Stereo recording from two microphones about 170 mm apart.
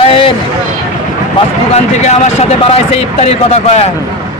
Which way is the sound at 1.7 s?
40° left (ahead or behind).